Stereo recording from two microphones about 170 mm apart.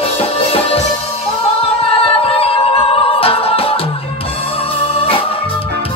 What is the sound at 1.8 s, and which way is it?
Music, 35° left (ahead or behind).